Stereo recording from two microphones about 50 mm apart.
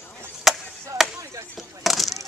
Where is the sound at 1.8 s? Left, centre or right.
Centre.